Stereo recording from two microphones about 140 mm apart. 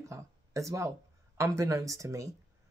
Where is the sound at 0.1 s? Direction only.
20° right (ahead or behind).